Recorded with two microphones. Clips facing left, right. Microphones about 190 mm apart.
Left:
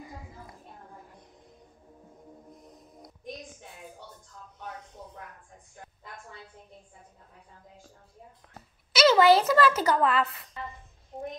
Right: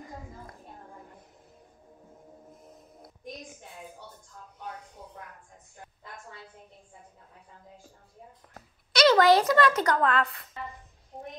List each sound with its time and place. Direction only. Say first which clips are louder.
2.5 s music: left 1 dB; 5° right (ahead or behind)
8.9 s a woman's voice: even; 5° left (ahead or behind)